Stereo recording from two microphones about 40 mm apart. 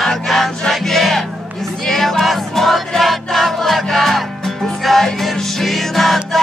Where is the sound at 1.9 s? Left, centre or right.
Centre.